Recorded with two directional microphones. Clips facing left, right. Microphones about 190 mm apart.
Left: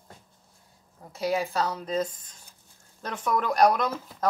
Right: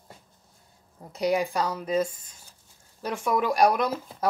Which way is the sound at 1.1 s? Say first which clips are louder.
Right 2 dB; 15° right (ahead or behind).